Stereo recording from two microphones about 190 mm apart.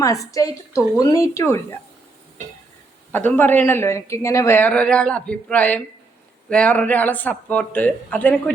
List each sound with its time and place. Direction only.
0.0 s speech: 15° left (ahead or behind)
3.1 s speech: 10° left (ahead or behind)